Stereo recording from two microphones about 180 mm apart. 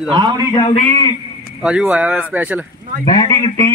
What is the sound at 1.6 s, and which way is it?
Speech, 5° right (ahead or behind).